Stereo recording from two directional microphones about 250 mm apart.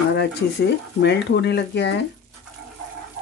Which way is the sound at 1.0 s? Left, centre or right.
Left.